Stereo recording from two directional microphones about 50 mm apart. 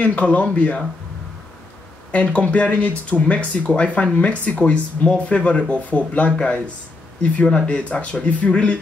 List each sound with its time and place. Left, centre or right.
0.0 s speech: left
2.1 s speech: left